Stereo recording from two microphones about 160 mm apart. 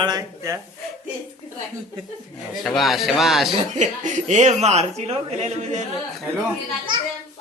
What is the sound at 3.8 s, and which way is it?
Speech, 50° right (ahead or behind).